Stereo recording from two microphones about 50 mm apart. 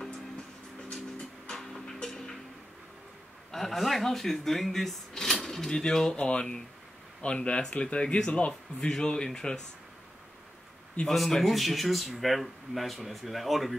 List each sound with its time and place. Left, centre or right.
1.5 s music: centre
3.5 s a man's voice: centre
11.1 s speech: centre